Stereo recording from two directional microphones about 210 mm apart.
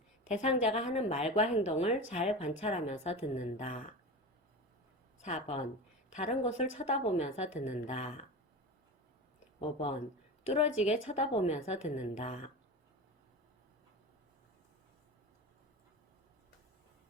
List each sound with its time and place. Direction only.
0.3 s a woman's voice: 30° left (ahead or behind)
5.2 s a woman's voice: 30° left (ahead or behind)
9.6 s a woman's voice: 25° left (ahead or behind)